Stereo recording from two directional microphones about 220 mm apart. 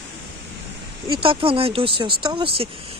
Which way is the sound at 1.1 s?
25° right (ahead or behind).